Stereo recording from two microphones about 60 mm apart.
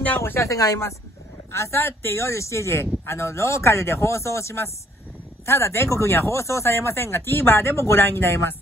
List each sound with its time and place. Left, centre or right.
0.2 s speech: left
7.7 s speech: left